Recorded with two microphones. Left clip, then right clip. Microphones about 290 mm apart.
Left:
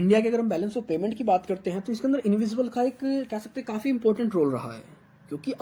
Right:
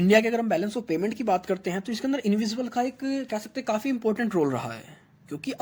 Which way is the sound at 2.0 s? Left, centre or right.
Right.